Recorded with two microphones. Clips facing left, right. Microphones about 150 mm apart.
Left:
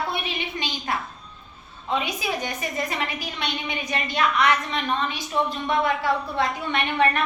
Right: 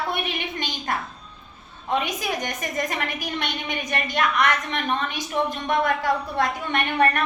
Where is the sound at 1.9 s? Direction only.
45° right (ahead or behind).